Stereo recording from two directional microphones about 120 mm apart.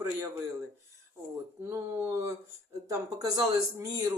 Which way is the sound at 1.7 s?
25° right (ahead or behind).